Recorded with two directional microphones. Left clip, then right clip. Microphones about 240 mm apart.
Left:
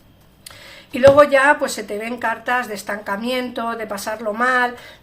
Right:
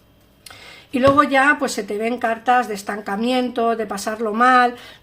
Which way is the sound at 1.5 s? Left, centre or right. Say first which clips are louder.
Left 1 dB; right.